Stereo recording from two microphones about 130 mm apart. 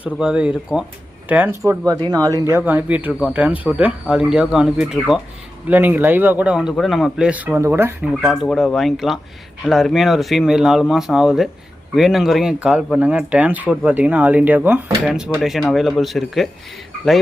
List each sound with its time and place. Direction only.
0.0 s speech: 5° right (ahead or behind)
1.6 s speech: 25° right (ahead or behind)
2.5 s speech: 15° right (ahead or behind)
8.1 s speech: centre (ahead or behind)